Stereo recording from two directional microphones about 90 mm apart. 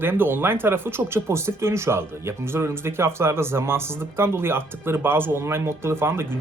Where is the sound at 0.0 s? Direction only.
25° right (ahead or behind).